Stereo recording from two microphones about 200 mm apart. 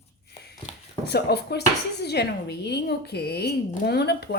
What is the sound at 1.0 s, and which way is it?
Speech, 55° left (ahead or behind).